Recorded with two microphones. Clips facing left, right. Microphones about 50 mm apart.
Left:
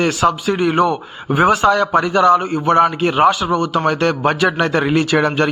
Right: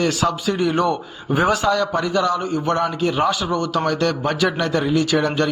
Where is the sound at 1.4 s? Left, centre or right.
Left.